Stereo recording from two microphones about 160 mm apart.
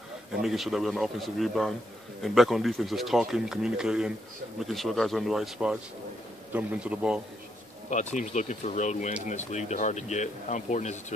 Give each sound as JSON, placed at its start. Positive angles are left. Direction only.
{"t": 0.4, "sound": "a man's voice", "side_deg": 0}
{"t": 7.9, "sound": "speech", "side_deg": 50}